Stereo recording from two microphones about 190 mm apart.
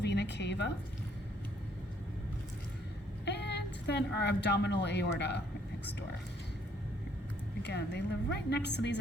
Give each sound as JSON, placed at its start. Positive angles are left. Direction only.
{"t": 0.0, "sound": "a sound", "side_deg": 60}
{"t": 3.2, "sound": "a woman's voice", "side_deg": 60}
{"t": 7.6, "sound": "a woman's voice", "side_deg": 60}